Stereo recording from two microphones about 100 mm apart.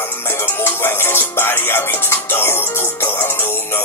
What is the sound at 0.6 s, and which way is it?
Music, 25° left (ahead or behind).